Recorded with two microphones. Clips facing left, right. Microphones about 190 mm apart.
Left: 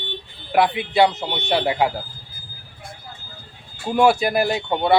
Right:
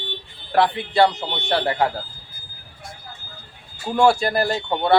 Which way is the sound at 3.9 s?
20° left (ahead or behind).